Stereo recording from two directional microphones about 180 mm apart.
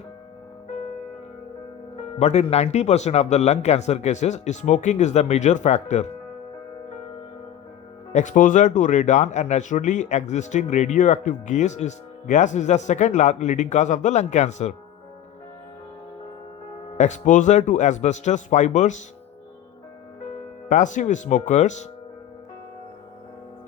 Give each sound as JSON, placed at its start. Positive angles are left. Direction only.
{"t": 2.1, "sound": "speech", "side_deg": 40}
{"t": 8.1, "sound": "speech", "side_deg": 45}
{"t": 17.0, "sound": "speech", "side_deg": 45}
{"t": 20.7, "sound": "speech", "side_deg": 45}